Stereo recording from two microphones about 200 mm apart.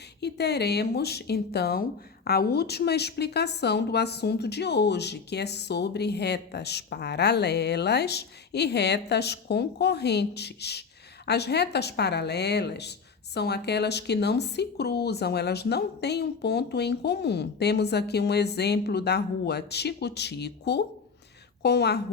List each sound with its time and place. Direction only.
0.2 s speech: 55° left (ahead or behind)